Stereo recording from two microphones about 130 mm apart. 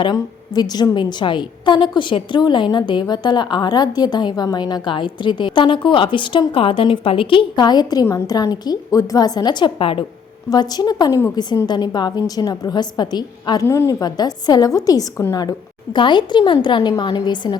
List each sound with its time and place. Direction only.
0.0 s a woman's voice: 35° left (ahead or behind)
10.5 s a woman's voice: 30° left (ahead or behind)
13.7 s a woman's voice: 20° left (ahead or behind)